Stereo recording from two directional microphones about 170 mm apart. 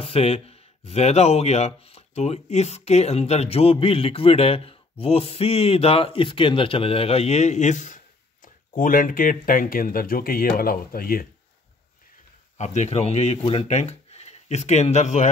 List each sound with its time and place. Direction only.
0.0 s speech: 35° left (ahead or behind); by 11.2 s 60° left (ahead or behind)
12.5 s speech: 45° left (ahead or behind)